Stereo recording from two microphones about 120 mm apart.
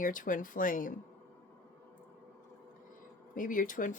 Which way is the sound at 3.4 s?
90° left.